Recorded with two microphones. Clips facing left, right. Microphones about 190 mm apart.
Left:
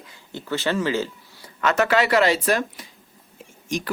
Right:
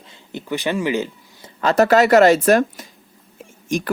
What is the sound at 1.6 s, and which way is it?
Speech, 35° right (ahead or behind).